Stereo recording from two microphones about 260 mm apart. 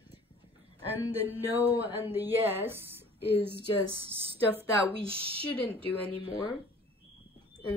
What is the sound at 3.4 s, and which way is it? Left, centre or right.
Speech, right.